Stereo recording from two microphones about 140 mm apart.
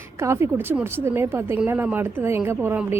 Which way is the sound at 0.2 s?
20° right (ahead or behind).